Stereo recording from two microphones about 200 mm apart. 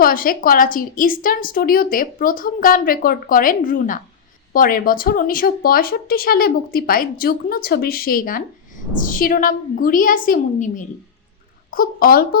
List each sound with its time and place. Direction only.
0.0 s a woman's voice: 45° left (ahead or behind)